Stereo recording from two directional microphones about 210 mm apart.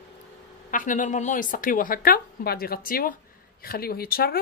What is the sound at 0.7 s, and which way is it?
A woman's voice, 40° left (ahead or behind).